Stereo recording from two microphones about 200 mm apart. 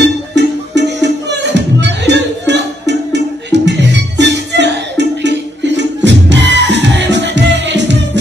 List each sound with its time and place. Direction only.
0.0 s music: 60° right (ahead or behind)